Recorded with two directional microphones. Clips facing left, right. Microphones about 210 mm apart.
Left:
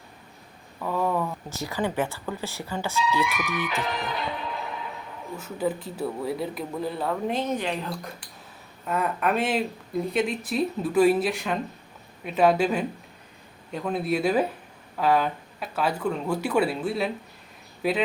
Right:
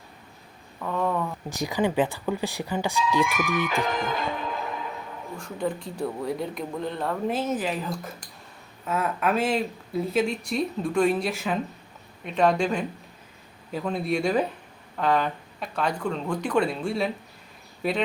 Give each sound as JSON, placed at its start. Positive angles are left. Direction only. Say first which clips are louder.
{"t": 0.8, "sound": "a sound", "louder": "left 1 dB", "side_deg": 5}
{"t": 1.5, "sound": "speech", "louder": "right 3 dB", "side_deg": -15}
{"t": 3.0, "sound": "speech", "louder": "right 1 dB", "side_deg": -50}
{"t": 5.4, "sound": "speech", "louder": "left 2 dB", "side_deg": 5}